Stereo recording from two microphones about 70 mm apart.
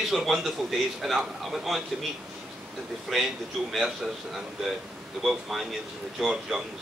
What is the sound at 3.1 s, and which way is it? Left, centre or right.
Speech, centre.